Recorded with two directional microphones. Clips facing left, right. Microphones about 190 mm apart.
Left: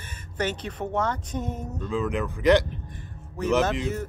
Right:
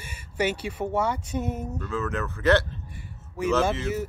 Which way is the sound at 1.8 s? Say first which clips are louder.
Left 5 dB; 15° left (ahead or behind).